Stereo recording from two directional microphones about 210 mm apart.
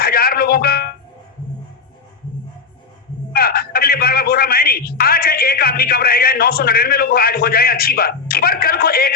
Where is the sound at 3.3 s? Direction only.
45° left (ahead or behind).